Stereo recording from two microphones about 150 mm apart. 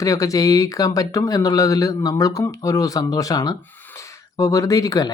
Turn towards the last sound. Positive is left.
turn(degrees=25)  # may be behind; listen again after turning